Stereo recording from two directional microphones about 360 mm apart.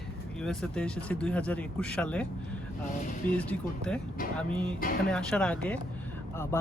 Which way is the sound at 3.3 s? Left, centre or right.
Centre.